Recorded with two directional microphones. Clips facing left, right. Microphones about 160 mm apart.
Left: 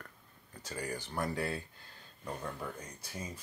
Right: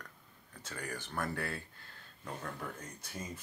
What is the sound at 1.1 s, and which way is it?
Speech, 15° left (ahead or behind).